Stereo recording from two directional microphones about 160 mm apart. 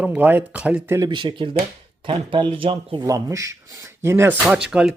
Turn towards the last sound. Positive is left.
turn(degrees=-5)  # may be behind; listen again after turning